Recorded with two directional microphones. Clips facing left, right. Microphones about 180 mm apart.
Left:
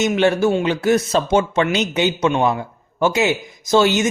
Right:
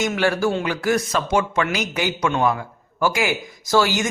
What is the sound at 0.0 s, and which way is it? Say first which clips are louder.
A man's voice: left 4 dB; 20° left (ahead or behind).